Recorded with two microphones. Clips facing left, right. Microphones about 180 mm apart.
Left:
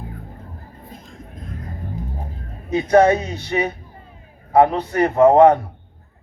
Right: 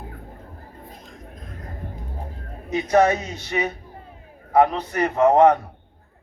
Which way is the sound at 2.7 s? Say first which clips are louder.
Left 4 dB; 25° left (ahead or behind).